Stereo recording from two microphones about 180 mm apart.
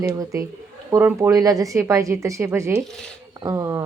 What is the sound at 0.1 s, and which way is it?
A woman's voice, 20° right (ahead or behind).